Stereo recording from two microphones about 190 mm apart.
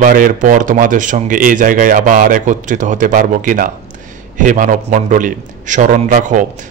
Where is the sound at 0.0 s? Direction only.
45° right (ahead or behind).